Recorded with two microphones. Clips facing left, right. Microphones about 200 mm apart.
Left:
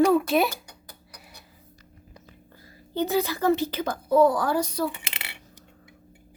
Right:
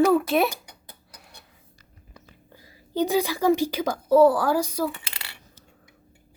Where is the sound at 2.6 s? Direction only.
15° right (ahead or behind).